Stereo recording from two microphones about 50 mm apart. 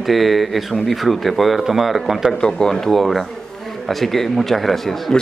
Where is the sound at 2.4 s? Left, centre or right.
Centre.